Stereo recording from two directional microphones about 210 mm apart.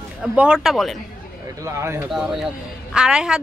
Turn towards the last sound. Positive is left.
turn(degrees=-5)  # may be behind; listen again after turning